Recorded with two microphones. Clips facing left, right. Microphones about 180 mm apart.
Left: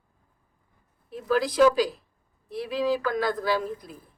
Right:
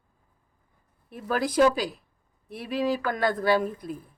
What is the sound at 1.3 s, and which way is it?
A woman's voice, 55° right (ahead or behind).